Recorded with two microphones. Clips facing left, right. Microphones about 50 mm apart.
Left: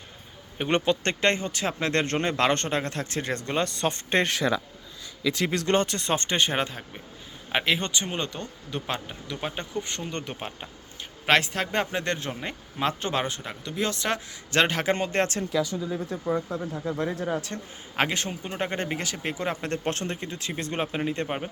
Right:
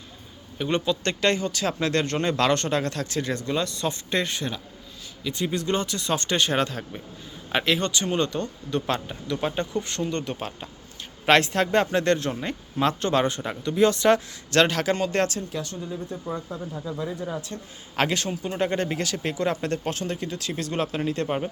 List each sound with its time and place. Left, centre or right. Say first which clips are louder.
0.6 s speech: left 1 dB; left
1.0 s speech: right 1 dB; left
5.3 s speech: left 1 dB; left
6.1 s speech: right 2 dB; left
11.3 s speech: right 4 dB; centre
13.2 s speech: right 6 dB; centre
14.5 s speech: right 2 dB; centre
15.9 s speech: left 2 dB; left
16.5 s speech: left 2 dB; left
17.3 s speech: left 2 dB; left
17.9 s a man's voice: right 2 dB; centre
19.7 s speech: right 1 dB; left
20.1 s speech: right 3 dB; left